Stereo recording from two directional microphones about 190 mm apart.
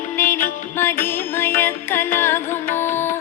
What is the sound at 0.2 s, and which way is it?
Music, 10° left (ahead or behind).